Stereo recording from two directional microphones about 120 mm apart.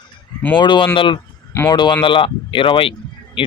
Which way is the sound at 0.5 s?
40° left (ahead or behind).